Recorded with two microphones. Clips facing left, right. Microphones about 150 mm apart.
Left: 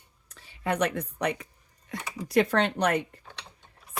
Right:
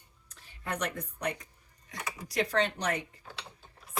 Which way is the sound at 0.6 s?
75° left (ahead or behind).